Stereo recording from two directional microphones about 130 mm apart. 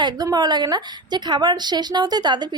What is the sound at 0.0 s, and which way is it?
A woman's voice, 30° right (ahead or behind).